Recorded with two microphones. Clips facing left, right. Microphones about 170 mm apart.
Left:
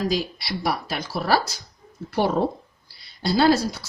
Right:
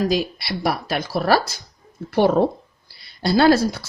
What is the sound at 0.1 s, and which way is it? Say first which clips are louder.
Speech: right 4 dB; 60° right (ahead or behind).